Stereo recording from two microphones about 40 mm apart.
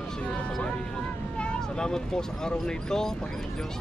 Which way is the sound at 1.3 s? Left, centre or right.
Left.